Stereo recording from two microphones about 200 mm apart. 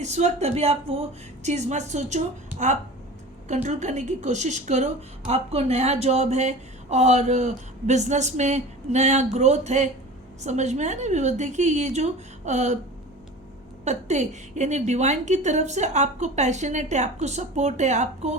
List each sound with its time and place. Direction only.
0.0 s a woman's voice: 35° right (ahead or behind)
3.5 s a woman's voice: 35° right (ahead or behind)
13.8 s a woman's voice: 35° right (ahead or behind)